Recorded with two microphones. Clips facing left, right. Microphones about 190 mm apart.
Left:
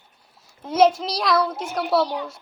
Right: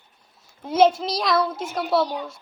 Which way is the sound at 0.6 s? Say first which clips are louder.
Even; centre (ahead or behind).